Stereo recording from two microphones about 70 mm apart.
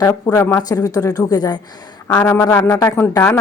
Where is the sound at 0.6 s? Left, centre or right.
Left.